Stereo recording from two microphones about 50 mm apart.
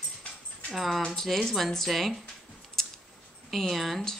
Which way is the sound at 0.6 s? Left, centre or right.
Centre.